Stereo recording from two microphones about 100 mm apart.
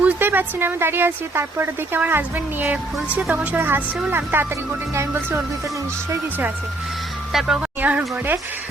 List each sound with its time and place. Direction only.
0.0 s speech: 20° right (ahead or behind)
7.3 s speech: 5° right (ahead or behind)
7.8 s speech: 15° right (ahead or behind)